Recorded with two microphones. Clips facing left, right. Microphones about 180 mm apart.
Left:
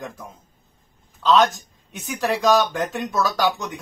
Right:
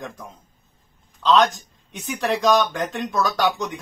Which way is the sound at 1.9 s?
Centre (ahead or behind).